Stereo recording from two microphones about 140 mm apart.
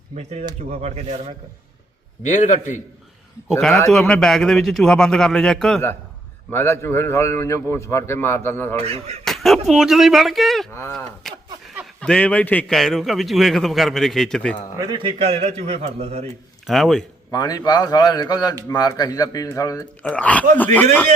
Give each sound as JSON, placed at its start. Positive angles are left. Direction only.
{"t": 0.2, "sound": "a man's voice", "side_deg": -50}
{"t": 2.2, "sound": "a man's voice", "side_deg": 60}
{"t": 3.9, "sound": "a man's voice", "side_deg": 5}
{"t": 6.5, "sound": "a man's voice", "side_deg": 15}
{"t": 8.7, "sound": "a man's voice", "side_deg": -50}
{"t": 9.2, "sound": "speech", "side_deg": 0}
{"t": 10.7, "sound": "a man's voice", "side_deg": 20}
{"t": 10.9, "sound": "a man's voice", "side_deg": 0}
{"t": 14.8, "sound": "a man's voice", "side_deg": -30}
{"t": 16.6, "sound": "a man's voice", "side_deg": 0}
{"t": 17.3, "sound": "a man's voice", "side_deg": 30}
{"t": 20.0, "sound": "a man's voice", "side_deg": 10}